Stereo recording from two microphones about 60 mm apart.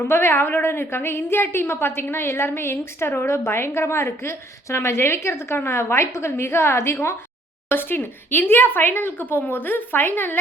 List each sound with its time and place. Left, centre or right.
0.0 s a woman's voice: left